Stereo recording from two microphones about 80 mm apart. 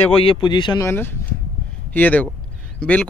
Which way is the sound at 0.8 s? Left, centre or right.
Left.